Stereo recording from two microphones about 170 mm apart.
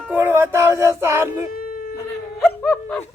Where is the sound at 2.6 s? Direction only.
10° left (ahead or behind).